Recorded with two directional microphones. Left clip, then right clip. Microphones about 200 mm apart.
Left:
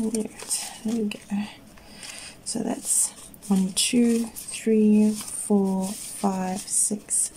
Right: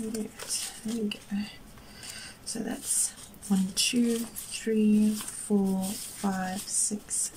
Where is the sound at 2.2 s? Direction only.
20° left (ahead or behind).